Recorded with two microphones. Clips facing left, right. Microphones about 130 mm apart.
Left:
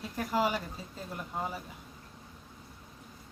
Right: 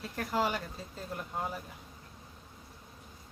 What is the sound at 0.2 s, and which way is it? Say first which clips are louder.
Speech: left 2 dB; 5° left (ahead or behind).